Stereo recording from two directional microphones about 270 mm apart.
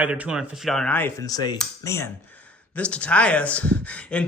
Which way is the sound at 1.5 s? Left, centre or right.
Centre.